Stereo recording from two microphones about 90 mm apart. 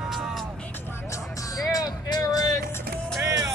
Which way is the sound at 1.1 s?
40° left (ahead or behind).